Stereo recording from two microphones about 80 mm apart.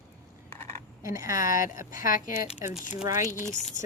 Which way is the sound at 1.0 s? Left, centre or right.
Right.